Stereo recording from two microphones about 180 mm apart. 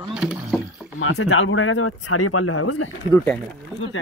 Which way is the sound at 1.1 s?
90° left.